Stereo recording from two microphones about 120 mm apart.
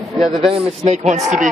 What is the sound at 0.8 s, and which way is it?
Speech, 75° right (ahead or behind).